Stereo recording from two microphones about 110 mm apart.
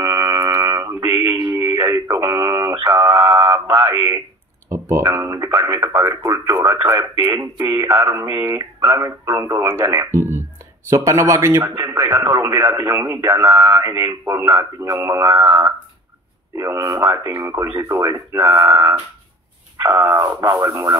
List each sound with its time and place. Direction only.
0.0 s mantra: 35° right (ahead or behind)
1.4 s radio: 35° right (ahead or behind)
2.7 s mantra: 45° right (ahead or behind)
3.3 s a sound: 40° right (ahead or behind)
4.6 s speech: 25° right (ahead or behind)
5.6 s speech: 45° right (ahead or behind)
5.9 s speech: 30° right (ahead or behind)
10.1 s a sound: 20° right (ahead or behind)
10.9 s speech: 25° right (ahead or behind)